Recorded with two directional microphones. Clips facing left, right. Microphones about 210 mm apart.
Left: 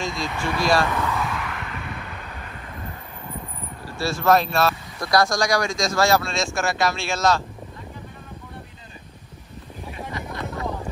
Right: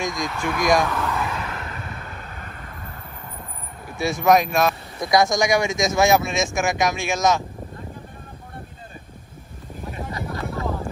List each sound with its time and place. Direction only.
0.0 s speech: 15° right (ahead or behind)
0.8 s a sound: centre (ahead or behind)
1.6 s vehicle: 40° right (ahead or behind)
4.0 s speech: 15° right (ahead or behind)
10.3 s vehicle: 5° right (ahead or behind)